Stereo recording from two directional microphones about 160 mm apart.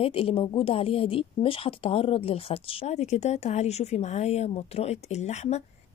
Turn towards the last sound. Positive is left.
turn(degrees=45)  # may be behind; listen again after turning